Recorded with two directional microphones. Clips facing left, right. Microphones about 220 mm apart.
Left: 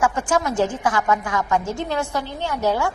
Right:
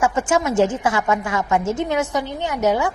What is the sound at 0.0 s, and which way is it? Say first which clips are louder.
A woman's voice: right 2 dB; 25° right (ahead or behind).